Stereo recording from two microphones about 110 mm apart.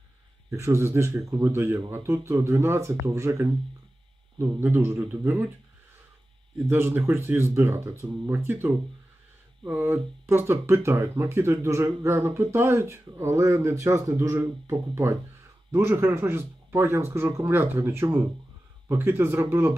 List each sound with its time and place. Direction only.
0.5 s speech: 25° right (ahead or behind)
6.6 s speech: 20° right (ahead or behind)